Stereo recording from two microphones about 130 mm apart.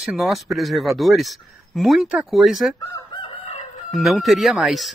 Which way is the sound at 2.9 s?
30° left (ahead or behind).